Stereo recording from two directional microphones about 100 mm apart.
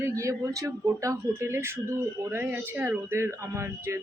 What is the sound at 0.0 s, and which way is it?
Speech, 30° right (ahead or behind).